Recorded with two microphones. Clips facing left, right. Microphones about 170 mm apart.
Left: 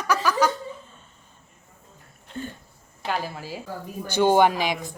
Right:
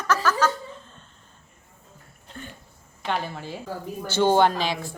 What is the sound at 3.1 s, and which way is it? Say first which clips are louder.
Speech: even; 5° left (ahead or behind).